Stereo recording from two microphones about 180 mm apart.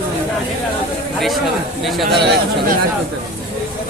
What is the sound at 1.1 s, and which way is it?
Speech, centre (ahead or behind).